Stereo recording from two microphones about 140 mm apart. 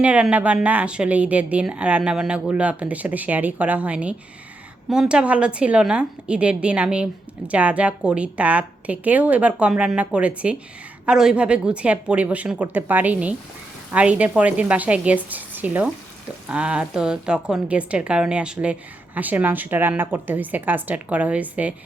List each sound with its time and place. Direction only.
0.0 s a woman's voice: 10° right (ahead or behind)